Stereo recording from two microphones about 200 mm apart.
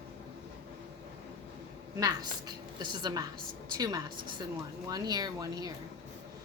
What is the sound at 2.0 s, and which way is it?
A woman's voice, 20° right (ahead or behind).